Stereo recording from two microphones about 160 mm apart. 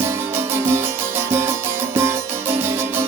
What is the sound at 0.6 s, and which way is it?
Music, 15° right (ahead or behind).